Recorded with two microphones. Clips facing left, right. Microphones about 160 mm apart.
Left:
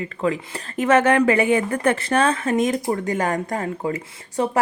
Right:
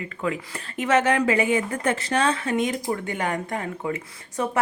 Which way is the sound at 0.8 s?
55° left (ahead or behind).